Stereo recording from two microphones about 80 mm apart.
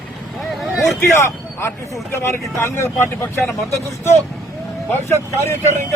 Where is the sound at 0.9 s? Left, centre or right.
Left.